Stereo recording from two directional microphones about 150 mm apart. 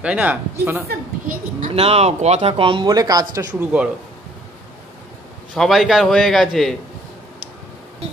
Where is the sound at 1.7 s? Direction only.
40° right (ahead or behind).